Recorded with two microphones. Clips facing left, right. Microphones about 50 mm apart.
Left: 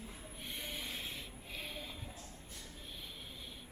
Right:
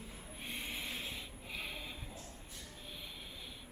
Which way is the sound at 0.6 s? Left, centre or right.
Right.